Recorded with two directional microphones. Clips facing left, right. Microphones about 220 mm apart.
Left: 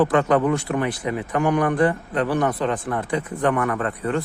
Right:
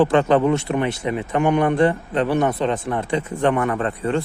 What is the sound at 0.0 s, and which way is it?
A man's voice, 25° right (ahead or behind).